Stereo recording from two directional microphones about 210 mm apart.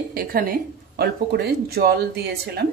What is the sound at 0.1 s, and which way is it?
Speech, 45° right (ahead or behind).